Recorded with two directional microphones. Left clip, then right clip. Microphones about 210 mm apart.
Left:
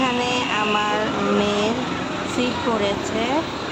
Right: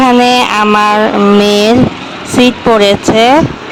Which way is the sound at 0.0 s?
50° right (ahead or behind).